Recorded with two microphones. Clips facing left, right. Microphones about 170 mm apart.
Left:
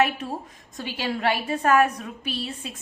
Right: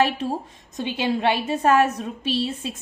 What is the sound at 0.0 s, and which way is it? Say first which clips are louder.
A woman's voice: right 2 dB; 30° right (ahead or behind).